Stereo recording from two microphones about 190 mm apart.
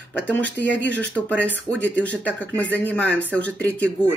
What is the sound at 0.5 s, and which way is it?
Speech, 70° left (ahead or behind).